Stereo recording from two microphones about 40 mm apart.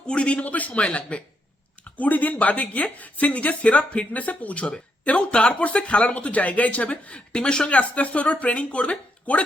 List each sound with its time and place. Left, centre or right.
0.1 s speech: left
1.8 s speech: left
7.3 s speech: centre
7.7 s speech: left